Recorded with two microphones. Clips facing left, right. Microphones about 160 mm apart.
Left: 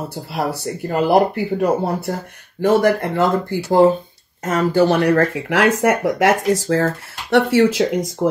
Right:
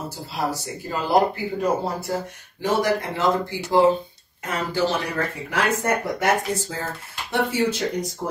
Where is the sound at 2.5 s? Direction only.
55° left (ahead or behind).